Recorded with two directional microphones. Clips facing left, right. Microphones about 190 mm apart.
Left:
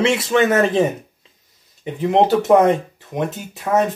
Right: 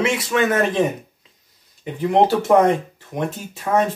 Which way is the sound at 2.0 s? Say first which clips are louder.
Left 1 dB; 20° left (ahead or behind).